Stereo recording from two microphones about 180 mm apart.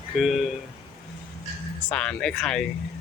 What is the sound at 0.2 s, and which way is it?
Speech, centre (ahead or behind).